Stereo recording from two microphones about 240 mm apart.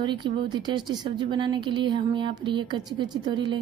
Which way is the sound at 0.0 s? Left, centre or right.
Centre.